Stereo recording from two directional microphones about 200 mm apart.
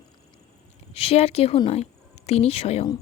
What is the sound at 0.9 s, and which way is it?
Speech, 30° left (ahead or behind).